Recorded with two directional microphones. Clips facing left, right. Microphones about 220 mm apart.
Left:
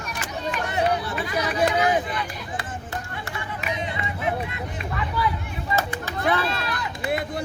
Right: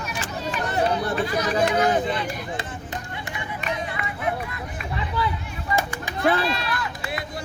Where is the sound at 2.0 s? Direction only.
30° right (ahead or behind).